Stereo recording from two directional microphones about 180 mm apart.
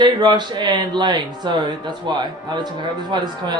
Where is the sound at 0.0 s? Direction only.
25° right (ahead or behind).